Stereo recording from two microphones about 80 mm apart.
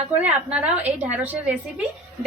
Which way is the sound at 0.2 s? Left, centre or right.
Centre.